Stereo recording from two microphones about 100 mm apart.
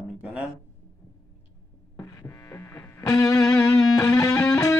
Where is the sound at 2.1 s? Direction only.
25° left (ahead or behind).